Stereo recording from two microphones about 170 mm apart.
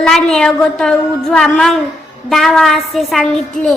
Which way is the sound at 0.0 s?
5° left (ahead or behind).